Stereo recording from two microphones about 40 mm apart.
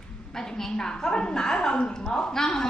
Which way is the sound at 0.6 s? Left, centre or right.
Centre.